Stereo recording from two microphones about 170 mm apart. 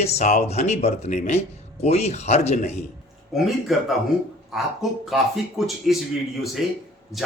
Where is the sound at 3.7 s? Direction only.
Centre (ahead or behind).